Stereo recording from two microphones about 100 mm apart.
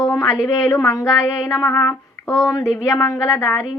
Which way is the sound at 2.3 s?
35° left (ahead or behind).